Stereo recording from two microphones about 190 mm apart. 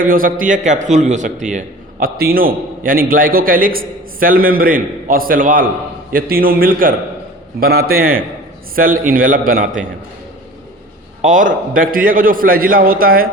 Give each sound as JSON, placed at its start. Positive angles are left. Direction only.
{"t": 0.0, "sound": "speech", "side_deg": -45}
{"t": 11.2, "sound": "speech", "side_deg": -45}